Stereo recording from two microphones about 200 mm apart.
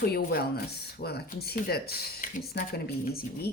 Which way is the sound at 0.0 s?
50° left (ahead or behind).